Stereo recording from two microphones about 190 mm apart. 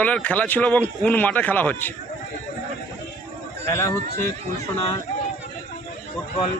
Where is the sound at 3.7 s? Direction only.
15° left (ahead or behind).